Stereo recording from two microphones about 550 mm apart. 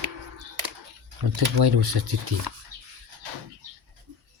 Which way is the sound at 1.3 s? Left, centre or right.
Right.